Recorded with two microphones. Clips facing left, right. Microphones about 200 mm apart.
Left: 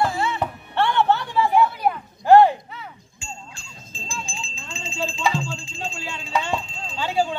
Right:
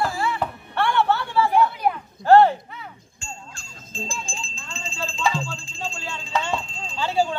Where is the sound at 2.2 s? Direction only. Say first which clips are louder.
Left 1 dB; 15° left (ahead or behind).